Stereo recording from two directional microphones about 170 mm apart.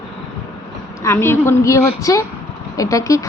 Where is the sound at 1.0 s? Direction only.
15° left (ahead or behind).